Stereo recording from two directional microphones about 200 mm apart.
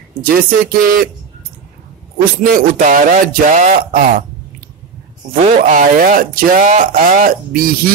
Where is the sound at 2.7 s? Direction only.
40° right (ahead or behind).